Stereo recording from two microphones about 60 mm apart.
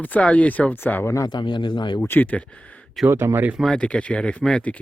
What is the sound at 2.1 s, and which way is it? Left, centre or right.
Speech, left.